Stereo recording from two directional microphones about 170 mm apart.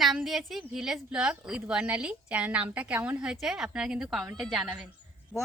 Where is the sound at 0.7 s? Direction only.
5° right (ahead or behind).